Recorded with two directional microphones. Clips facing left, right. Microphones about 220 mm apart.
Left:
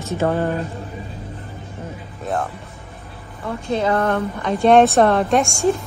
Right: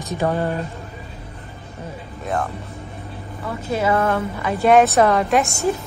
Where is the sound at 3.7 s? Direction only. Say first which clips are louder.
Even; 5° right (ahead or behind).